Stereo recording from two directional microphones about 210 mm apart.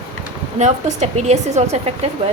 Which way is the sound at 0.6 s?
35° right (ahead or behind).